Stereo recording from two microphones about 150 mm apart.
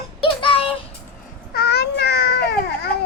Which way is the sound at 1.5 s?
90° left.